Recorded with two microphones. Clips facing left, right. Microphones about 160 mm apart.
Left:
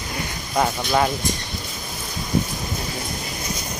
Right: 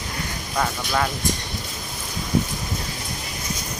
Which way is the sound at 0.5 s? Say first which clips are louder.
Left 4 dB; 25° left (ahead or behind).